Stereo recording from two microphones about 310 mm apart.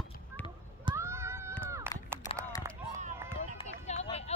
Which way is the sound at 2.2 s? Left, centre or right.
Centre.